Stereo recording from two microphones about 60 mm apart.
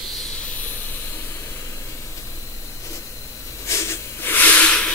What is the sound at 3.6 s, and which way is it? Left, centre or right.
Hiss, left.